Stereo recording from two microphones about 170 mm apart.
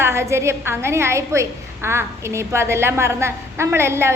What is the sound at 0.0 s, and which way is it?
A woman's voice, 15° right (ahead or behind).